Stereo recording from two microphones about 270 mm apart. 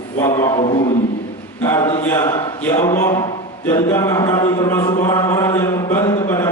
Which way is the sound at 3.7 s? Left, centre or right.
Centre.